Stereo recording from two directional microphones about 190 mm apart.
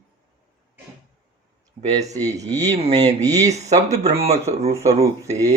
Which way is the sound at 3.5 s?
35° right (ahead or behind).